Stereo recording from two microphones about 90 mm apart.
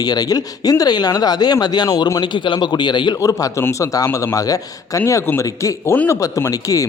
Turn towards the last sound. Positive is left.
turn(degrees=40)  # may be behind; listen again after turning